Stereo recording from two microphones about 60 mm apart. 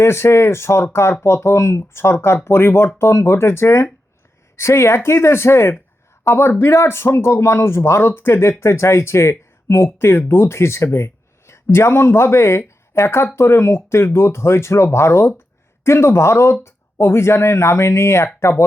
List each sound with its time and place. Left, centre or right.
0.0 s speech: left